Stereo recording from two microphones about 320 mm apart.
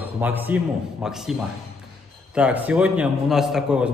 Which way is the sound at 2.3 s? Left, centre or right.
Centre.